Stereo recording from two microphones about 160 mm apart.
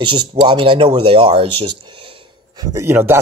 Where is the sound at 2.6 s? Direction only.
20° right (ahead or behind).